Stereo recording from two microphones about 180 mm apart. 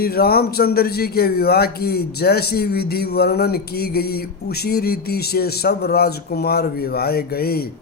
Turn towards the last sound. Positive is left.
turn(degrees=60)  # may be behind; listen again after turning